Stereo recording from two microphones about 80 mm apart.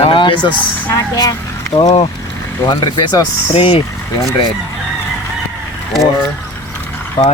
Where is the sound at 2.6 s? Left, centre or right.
Left.